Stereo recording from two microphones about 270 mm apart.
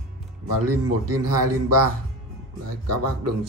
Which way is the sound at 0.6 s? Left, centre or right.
Right.